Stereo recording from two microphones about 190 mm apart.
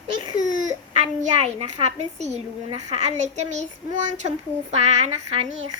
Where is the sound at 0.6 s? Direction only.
40° right (ahead or behind).